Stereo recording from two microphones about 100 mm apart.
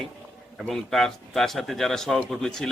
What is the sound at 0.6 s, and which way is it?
A man's voice, 5° left (ahead or behind).